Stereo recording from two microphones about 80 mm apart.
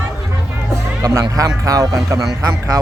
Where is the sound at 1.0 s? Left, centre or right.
Right.